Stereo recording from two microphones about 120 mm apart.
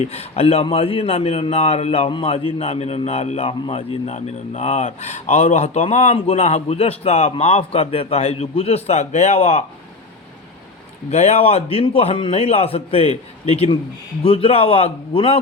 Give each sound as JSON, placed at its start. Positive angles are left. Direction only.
{"t": 0.0, "sound": "a man's voice", "side_deg": 60}
{"t": 2.3, "sound": "a man's voice", "side_deg": 60}
{"t": 11.1, "sound": "a man's voice", "side_deg": 65}